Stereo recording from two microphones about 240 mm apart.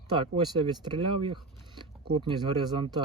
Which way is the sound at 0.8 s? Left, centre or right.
Centre.